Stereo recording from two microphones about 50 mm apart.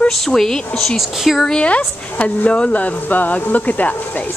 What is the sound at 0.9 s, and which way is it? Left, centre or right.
Speech, centre.